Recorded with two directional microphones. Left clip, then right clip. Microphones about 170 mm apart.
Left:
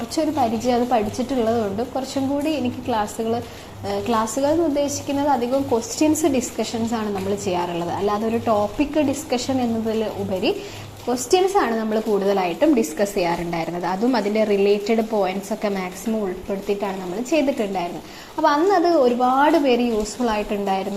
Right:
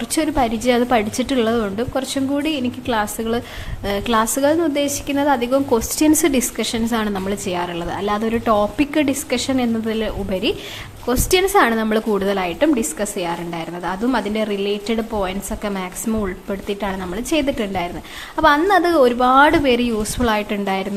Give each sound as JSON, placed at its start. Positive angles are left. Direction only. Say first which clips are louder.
{"t": 0.2, "sound": "a woman's voice", "louder": "right 2 dB", "side_deg": -30}
{"t": 11.3, "sound": "a woman's voice", "louder": "right 3 dB", "side_deg": -25}
{"t": 12.3, "sound": "a woman's voice", "louder": "even", "side_deg": -15}
{"t": 13.0, "sound": "a woman's voice", "louder": "left 2 dB", "side_deg": -5}
{"t": 16.2, "sound": "a woman's voice", "louder": "even", "side_deg": -20}